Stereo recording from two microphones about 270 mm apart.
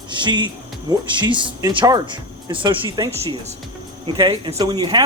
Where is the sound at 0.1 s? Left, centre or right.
Centre.